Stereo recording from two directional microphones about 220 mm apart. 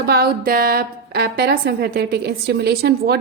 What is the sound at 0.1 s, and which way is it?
A woman's voice, 45° right (ahead or behind).